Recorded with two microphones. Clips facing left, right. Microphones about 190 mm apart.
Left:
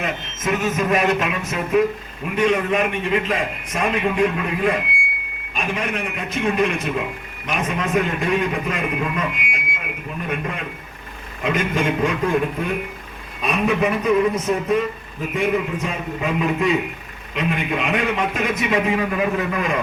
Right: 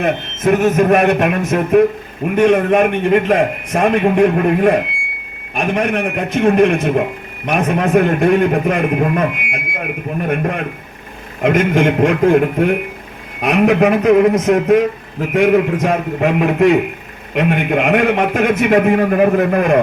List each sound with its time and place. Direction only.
0.0 s a man's voice: 60° right (ahead or behind)
11.4 s a man's voice: 70° right (ahead or behind)